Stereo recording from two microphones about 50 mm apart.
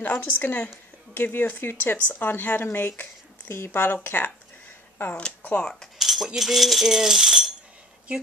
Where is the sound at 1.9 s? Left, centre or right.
Left.